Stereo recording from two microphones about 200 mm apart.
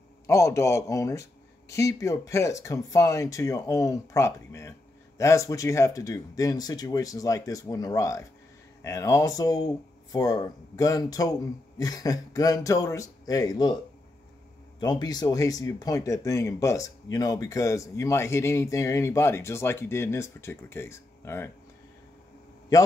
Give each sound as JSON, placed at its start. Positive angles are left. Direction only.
{"t": 0.3, "sound": "speech", "side_deg": 15}
{"t": 14.8, "sound": "speech", "side_deg": 20}